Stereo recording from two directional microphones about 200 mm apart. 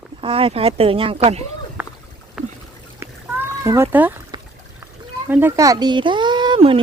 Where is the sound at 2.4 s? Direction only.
5° right (ahead or behind).